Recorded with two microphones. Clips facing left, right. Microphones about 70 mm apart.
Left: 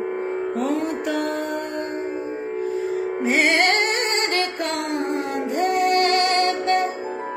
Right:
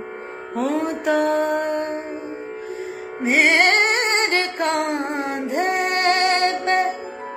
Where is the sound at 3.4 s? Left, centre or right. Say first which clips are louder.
Right 4 dB; right.